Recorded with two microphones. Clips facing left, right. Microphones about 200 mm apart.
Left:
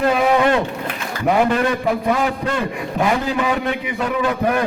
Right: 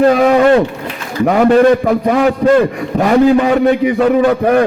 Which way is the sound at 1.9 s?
55° right (ahead or behind).